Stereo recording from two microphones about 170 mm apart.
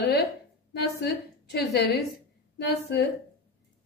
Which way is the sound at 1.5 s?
70° left (ahead or behind).